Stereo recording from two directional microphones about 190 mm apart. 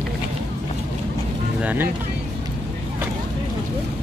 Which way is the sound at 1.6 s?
10° right (ahead or behind).